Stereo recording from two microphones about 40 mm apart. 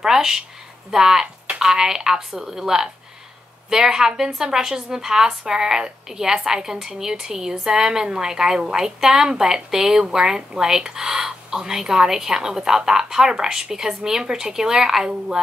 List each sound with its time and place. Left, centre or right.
0.0 s a woman's voice: centre